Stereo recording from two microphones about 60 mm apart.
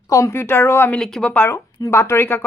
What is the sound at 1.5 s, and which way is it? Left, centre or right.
Speech, left.